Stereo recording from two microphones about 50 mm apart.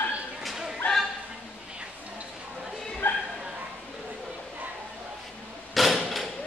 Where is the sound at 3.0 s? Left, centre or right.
Left.